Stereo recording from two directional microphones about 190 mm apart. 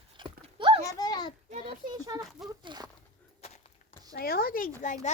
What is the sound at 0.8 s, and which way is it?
Speech, 20° left (ahead or behind).